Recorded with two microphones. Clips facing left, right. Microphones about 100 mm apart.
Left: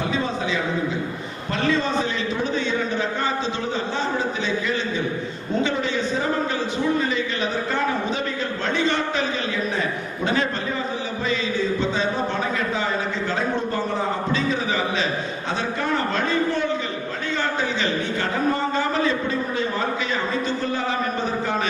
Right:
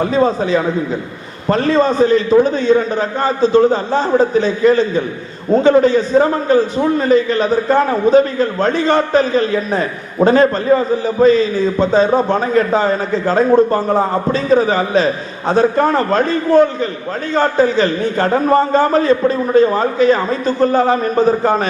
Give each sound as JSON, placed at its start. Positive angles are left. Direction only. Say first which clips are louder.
{"t": 0.0, "sound": "a man's voice", "louder": "right 10 dB", "side_deg": -40}